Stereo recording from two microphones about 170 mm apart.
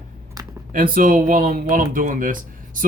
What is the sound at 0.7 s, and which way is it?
Speech, 55° right (ahead or behind).